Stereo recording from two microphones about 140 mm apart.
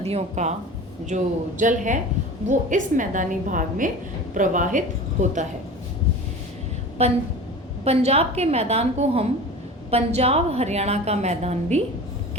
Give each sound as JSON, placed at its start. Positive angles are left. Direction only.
{"t": 0.0, "sound": "a woman's voice", "side_deg": -50}
{"t": 1.1, "sound": "a woman's voice", "side_deg": -65}
{"t": 7.0, "sound": "a woman's voice", "side_deg": -50}